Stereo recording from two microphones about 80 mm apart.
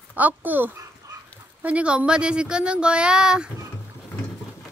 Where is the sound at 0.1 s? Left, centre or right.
Right.